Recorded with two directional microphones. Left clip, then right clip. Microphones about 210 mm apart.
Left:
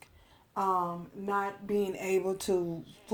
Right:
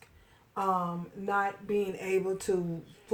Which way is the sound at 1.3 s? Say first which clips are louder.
Right 2 dB; 40° left (ahead or behind).